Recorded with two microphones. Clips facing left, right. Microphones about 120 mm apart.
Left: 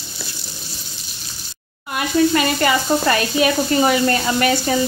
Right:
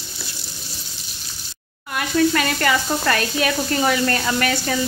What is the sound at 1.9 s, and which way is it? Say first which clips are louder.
Speech: left 2 dB; 10° left (ahead or behind).